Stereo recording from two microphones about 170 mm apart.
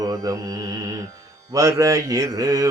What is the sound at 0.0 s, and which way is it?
Mantra, 20° right (ahead or behind).